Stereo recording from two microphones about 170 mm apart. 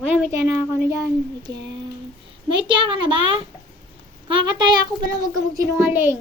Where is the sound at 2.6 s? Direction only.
30° right (ahead or behind).